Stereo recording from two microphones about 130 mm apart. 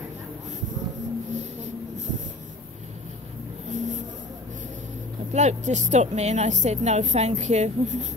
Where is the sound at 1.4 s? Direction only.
65° right (ahead or behind).